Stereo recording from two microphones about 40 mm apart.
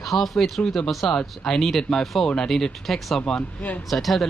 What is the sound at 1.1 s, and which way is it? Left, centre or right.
Speech, centre.